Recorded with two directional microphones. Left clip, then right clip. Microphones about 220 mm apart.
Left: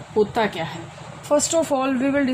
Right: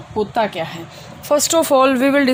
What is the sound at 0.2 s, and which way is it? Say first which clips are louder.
Speech: right 2 dB; 25° right (ahead or behind).